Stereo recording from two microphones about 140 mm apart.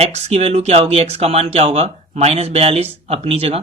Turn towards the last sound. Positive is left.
turn(degrees=-45)  # may be behind; listen again after turning